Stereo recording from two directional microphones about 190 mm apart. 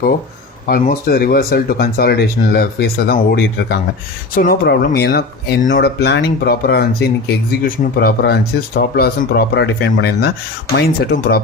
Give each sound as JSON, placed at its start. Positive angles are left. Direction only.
{"t": 0.7, "sound": "speech", "side_deg": 50}